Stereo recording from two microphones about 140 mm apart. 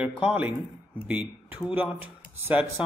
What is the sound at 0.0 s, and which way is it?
Speech, 10° right (ahead or behind).